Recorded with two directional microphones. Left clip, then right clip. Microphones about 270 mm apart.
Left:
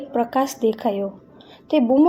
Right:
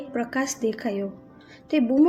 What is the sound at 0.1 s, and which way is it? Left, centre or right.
A woman's voice, centre.